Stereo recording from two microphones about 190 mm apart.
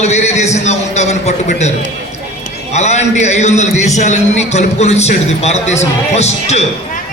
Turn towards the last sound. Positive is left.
turn(degrees=35)  # may be behind; listen again after turning